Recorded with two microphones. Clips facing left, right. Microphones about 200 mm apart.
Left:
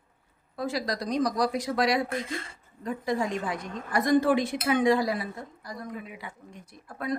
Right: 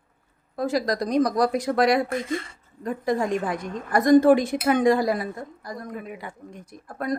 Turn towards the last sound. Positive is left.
turn(degrees=-45)  # may be behind; listen again after turning